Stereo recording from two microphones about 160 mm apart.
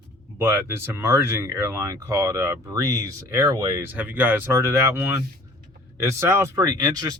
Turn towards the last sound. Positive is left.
turn(degrees=-25)  # may be behind; listen again after turning